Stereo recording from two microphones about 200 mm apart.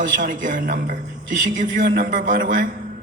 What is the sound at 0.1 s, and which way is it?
A man's voice, 40° right (ahead or behind).